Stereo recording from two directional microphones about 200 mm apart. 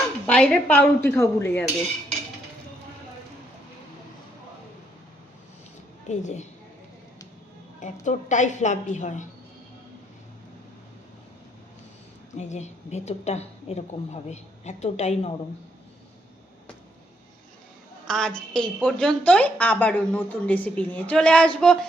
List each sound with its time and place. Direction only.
0.3 s a woman's voice: 5° left (ahead or behind)
6.1 s a woman's voice: 35° left (ahead or behind)
8.0 s a woman's voice: 35° left (ahead or behind)
12.3 s a woman's voice: 35° left (ahead or behind)
18.1 s a woman's voice: 5° left (ahead or behind)